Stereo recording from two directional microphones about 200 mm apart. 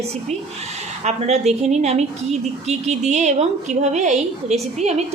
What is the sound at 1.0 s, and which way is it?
A woman's voice, 35° right (ahead or behind).